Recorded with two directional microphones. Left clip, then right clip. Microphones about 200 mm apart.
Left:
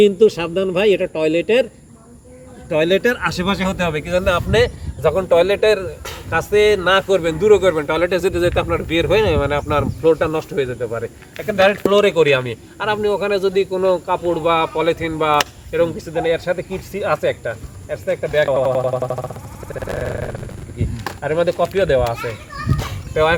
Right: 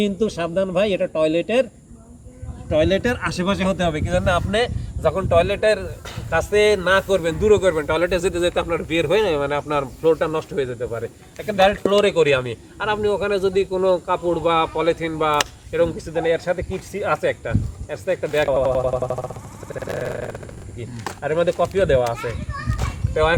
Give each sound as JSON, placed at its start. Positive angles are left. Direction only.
{"t": 0.0, "sound": "speech", "side_deg": 20}
{"t": 2.6, "sound": "a man's voice", "side_deg": 15}
{"t": 17.8, "sound": "speech", "side_deg": -40}
{"t": 18.4, "sound": "a man's voice", "side_deg": 0}
{"t": 19.7, "sound": "a sound", "side_deg": 0}
{"t": 21.2, "sound": "a man's voice", "side_deg": 0}